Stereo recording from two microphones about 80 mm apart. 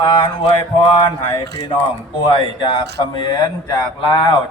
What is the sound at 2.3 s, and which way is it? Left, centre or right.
A man's voice, left.